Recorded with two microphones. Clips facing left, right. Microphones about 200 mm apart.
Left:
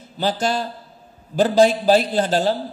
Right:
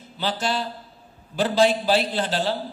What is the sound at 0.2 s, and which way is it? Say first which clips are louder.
A man's voice: left 4 dB; 45° left (ahead or behind).